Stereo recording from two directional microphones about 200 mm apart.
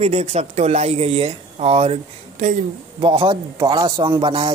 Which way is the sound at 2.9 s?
25° right (ahead or behind).